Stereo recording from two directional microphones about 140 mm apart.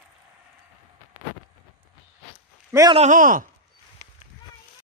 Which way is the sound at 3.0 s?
65° right (ahead or behind).